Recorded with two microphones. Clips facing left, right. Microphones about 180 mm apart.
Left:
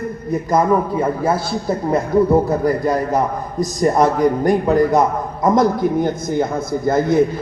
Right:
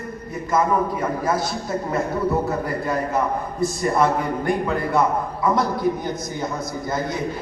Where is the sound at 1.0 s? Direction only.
30° left (ahead or behind).